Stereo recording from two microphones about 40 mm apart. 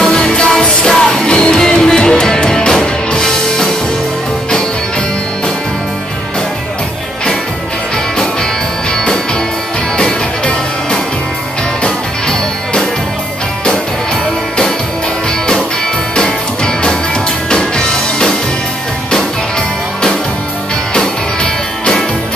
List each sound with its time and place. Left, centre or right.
0.0 s music: centre
8.9 s music: centre
16.2 s music: centre